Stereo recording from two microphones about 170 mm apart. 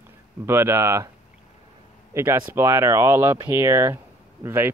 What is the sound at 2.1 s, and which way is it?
Speech, 15° right (ahead or behind).